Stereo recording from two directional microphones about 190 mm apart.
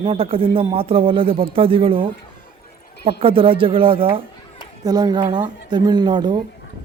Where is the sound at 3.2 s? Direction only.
30° right (ahead or behind).